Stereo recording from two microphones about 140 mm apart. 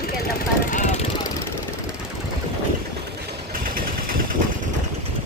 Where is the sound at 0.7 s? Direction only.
65° left (ahead or behind).